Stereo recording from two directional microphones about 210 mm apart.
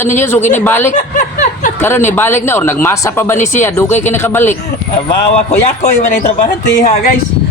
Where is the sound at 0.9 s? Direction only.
35° left (ahead or behind).